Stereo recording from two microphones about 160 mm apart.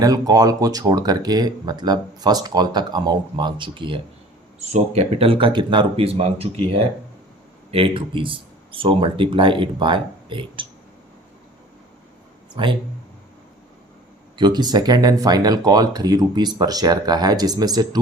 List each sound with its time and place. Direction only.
0.0 s speech: 25° right (ahead or behind)
14.3 s speech: 25° right (ahead or behind)